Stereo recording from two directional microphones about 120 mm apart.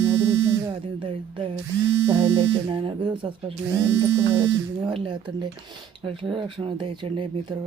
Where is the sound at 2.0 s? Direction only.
45° right (ahead or behind).